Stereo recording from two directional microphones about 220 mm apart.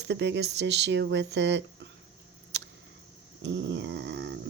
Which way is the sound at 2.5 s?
50° right (ahead or behind).